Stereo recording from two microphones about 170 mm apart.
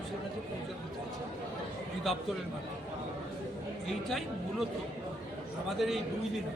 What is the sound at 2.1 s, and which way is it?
Speech, centre (ahead or behind).